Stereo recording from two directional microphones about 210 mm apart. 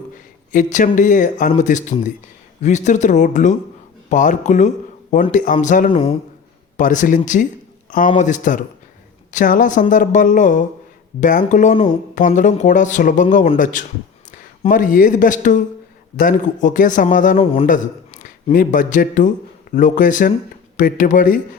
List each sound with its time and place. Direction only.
0.5 s a man's voice: 35° left (ahead or behind)